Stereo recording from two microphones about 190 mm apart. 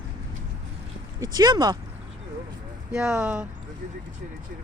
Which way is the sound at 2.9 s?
5° right (ahead or behind).